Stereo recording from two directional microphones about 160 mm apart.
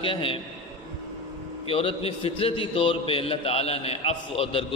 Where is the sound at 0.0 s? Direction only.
35° left (ahead or behind).